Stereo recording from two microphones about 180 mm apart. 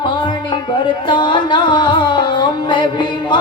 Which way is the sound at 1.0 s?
25° left (ahead or behind).